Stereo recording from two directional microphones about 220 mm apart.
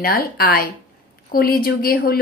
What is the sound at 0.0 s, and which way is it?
A woman's voice, 45° left (ahead or behind).